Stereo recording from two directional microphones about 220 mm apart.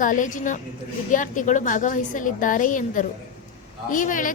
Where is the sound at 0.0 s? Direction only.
35° left (ahead or behind).